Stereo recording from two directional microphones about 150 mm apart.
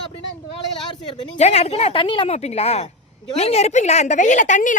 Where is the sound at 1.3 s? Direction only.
45° left (ahead or behind).